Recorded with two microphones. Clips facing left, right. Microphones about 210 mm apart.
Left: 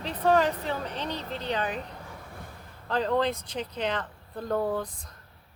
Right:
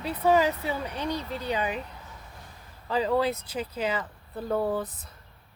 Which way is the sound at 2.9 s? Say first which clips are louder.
Right 1 dB; 5° right (ahead or behind).